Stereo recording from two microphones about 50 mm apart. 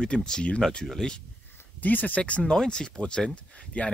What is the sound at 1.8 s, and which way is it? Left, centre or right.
Speech, left.